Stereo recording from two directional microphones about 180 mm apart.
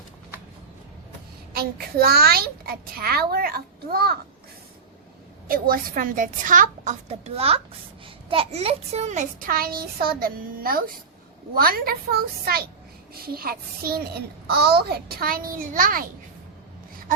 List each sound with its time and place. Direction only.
1.5 s a child's voice: 60° right (ahead or behind)
5.5 s a child's voice: 55° right (ahead or behind)